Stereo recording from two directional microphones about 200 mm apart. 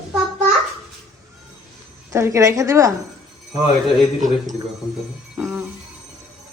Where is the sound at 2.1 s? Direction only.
15° right (ahead or behind).